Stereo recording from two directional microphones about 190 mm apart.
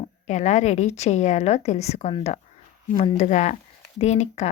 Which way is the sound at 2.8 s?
40° left (ahead or behind).